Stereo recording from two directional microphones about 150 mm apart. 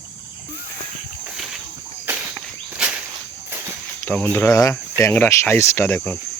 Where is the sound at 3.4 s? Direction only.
15° right (ahead or behind).